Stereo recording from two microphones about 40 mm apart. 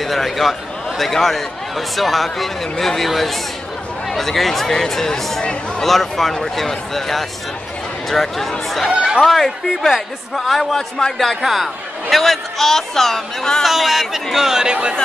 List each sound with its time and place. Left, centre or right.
0.0 s a man's voice: centre
11.0 s a man's voice: centre
11.4 s a man's voice: centre
13.7 s a man's voice: centre; by 15.0 s right